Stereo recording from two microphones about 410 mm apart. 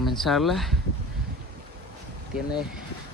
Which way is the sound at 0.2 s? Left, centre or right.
Centre.